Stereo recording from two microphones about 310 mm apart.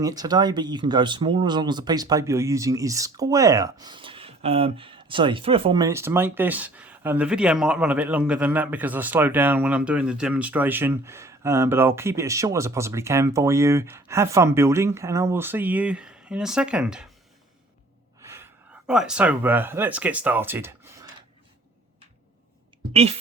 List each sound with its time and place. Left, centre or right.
0.0 s speech: centre
18.9 s speech: centre
22.9 s speech: centre